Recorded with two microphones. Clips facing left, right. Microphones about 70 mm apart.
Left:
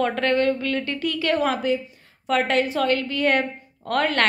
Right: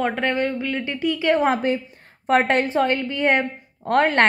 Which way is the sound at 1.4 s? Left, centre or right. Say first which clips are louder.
Right 2 dB; right.